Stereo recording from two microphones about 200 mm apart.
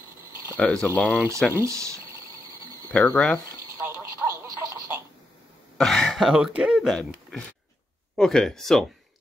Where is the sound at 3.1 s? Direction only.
5° left (ahead or behind).